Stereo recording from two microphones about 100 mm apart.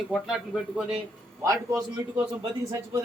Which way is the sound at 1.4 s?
30° right (ahead or behind).